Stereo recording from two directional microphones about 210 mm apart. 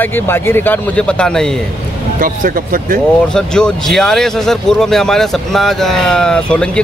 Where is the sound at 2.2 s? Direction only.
40° right (ahead or behind).